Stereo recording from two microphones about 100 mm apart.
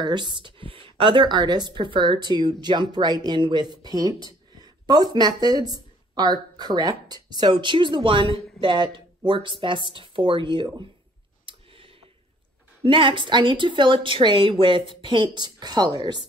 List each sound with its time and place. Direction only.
0.0 s a woman's voice: 50° right (ahead or behind)
12.8 s a woman's voice: 60° right (ahead or behind); by 16.2 s 40° right (ahead or behind)